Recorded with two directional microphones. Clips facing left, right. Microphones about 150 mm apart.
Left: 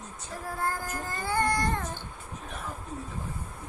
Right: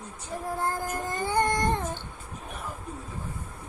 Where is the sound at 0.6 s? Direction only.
20° right (ahead or behind).